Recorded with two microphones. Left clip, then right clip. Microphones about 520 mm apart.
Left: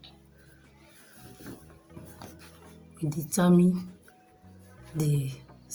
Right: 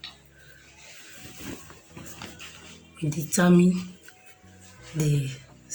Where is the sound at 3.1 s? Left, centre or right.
Left.